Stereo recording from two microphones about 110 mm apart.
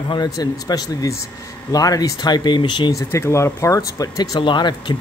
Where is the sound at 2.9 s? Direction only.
25° left (ahead or behind).